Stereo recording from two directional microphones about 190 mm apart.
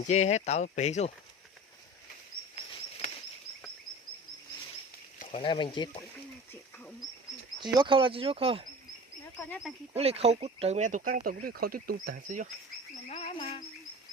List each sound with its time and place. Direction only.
0.1 s speech: 35° left (ahead or behind)
5.3 s speech: 25° left (ahead or behind)
6.5 s speech: 10° left (ahead or behind)
7.6 s speech: 25° right (ahead or behind)
9.4 s speech: 10° left (ahead or behind)
9.9 s speech: 35° right (ahead or behind)
13.1 s speech: 30° left (ahead or behind)